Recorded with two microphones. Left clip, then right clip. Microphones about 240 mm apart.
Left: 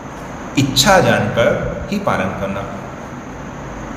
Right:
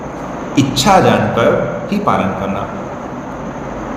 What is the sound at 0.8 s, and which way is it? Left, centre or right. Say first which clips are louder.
A man's voice: right 1 dB; left.